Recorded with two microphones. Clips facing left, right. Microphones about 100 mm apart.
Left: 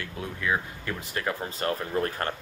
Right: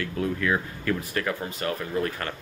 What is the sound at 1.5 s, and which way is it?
Speech, 35° left (ahead or behind).